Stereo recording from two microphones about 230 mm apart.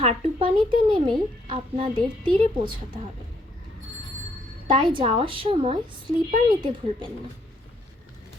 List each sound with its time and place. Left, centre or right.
0.0 s a woman's voice: right
4.7 s a woman's voice: right